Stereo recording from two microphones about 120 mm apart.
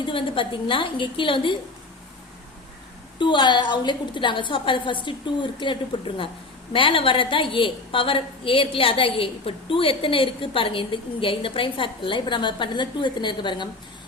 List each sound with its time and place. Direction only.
0.0 s a woman's voice: 45° left (ahead or behind)
3.2 s a woman's voice: 40° left (ahead or behind)